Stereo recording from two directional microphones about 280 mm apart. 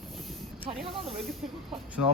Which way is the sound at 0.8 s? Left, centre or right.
Centre.